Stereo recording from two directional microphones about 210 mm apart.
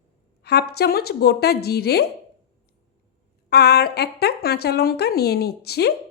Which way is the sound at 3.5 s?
50° left (ahead or behind).